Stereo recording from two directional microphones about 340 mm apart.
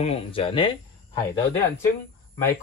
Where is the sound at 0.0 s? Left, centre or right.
Centre.